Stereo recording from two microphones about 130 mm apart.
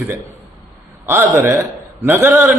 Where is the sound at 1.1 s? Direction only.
20° right (ahead or behind).